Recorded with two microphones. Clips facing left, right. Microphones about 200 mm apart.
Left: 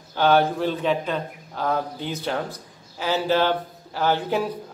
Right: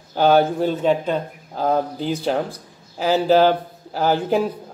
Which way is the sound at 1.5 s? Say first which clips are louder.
Right 5 dB; 35° right (ahead or behind).